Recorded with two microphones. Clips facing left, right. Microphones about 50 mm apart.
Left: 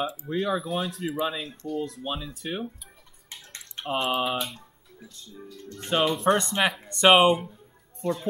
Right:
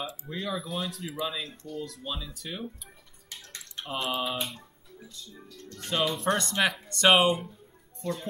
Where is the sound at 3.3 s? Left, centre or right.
Left.